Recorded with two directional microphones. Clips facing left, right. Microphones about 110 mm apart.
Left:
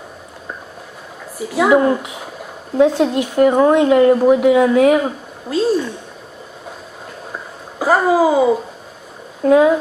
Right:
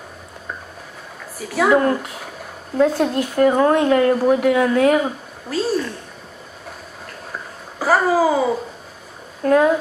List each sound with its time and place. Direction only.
1.5 s speech: 10° left (ahead or behind)
5.5 s a sound: 15° left (ahead or behind)
7.8 s babbling: 15° left (ahead or behind)
9.4 s speech: 5° left (ahead or behind)